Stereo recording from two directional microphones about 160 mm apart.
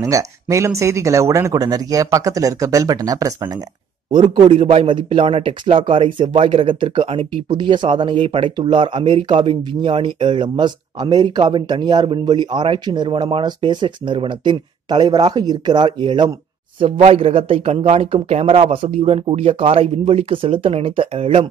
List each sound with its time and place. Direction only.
0.0 s a man's voice: 20° right (ahead or behind); by 21.5 s 35° right (ahead or behind)